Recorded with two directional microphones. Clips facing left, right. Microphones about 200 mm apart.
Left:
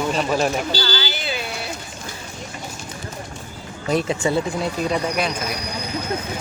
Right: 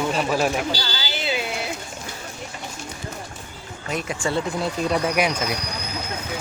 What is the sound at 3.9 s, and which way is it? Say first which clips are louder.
Speech: left 6 dB; 25° left (ahead or behind).